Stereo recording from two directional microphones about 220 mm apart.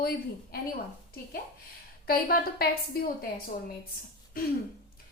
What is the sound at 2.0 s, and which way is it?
A woman's voice, 45° left (ahead or behind).